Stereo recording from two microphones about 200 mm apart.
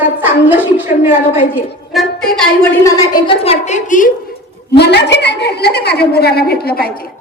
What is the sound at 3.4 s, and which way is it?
Speech, 35° left (ahead or behind).